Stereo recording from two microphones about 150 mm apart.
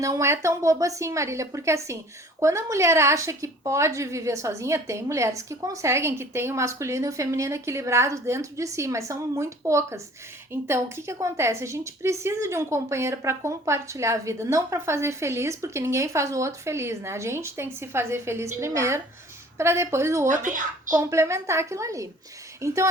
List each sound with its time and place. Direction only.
0.0 s speech: 20° right (ahead or behind)
20.2 s speech: 60° right (ahead or behind)
21.0 s speech: 20° right (ahead or behind)